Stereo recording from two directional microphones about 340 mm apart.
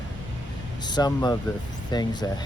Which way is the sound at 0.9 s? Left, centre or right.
Centre.